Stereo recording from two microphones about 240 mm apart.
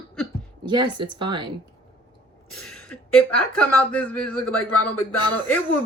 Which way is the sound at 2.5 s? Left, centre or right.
Centre.